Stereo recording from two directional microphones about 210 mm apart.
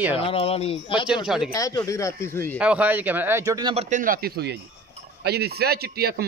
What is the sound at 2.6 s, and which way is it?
A man's voice, 5° right (ahead or behind).